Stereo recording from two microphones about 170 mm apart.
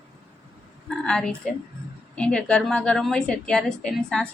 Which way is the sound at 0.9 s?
5° left (ahead or behind).